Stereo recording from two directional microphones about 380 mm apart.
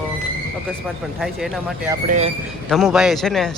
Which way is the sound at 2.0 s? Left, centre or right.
Centre.